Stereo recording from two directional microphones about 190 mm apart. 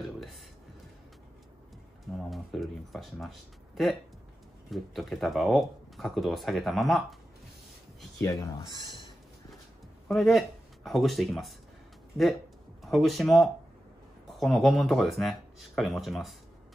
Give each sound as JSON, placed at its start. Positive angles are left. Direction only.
{"t": 0.0, "sound": "a sound", "side_deg": 0}
{"t": 2.2, "sound": "speech", "side_deg": 0}
{"t": 8.2, "sound": "speech", "side_deg": 15}
{"t": 10.0, "sound": "speech", "side_deg": 0}
{"t": 12.8, "sound": "speech", "side_deg": 0}